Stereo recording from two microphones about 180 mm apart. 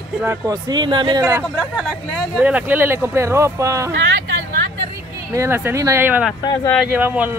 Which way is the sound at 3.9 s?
90° right.